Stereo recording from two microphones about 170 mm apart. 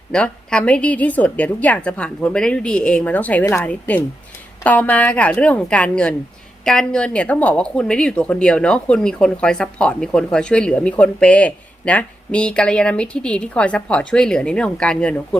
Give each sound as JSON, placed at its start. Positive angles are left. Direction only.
{"t": 0.1, "sound": "a woman's voice", "side_deg": 5}